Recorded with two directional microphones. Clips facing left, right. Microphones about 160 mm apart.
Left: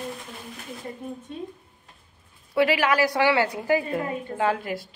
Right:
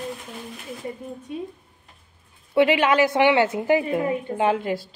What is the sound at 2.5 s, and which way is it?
A woman's voice, 20° right (ahead or behind).